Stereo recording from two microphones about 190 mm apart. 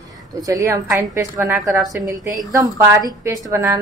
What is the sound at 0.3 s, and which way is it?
A woman's voice, 20° right (ahead or behind).